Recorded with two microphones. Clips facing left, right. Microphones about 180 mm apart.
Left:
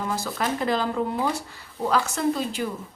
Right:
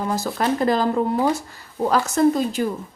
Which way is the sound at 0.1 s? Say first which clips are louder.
Right 7 dB; 40° right (ahead or behind).